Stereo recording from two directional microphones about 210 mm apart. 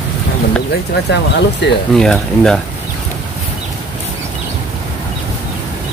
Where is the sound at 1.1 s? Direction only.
55° left (ahead or behind).